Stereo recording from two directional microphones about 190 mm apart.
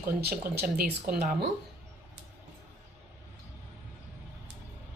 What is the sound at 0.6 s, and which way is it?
Speech, 50° right (ahead or behind).